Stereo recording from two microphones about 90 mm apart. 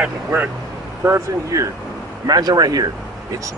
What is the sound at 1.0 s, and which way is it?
Speech, 35° right (ahead or behind).